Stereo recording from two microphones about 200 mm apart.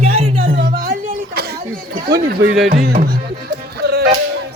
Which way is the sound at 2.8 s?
45° right (ahead or behind).